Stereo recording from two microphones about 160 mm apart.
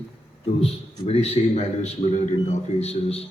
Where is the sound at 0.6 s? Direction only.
40° left (ahead or behind).